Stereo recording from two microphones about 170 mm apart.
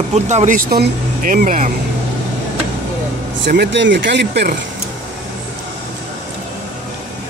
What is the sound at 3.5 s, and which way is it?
Speech, 80° right.